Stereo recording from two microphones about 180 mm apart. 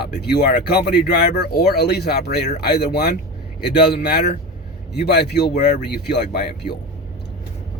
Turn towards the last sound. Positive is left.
turn(degrees=60)  # may be behind; listen again after turning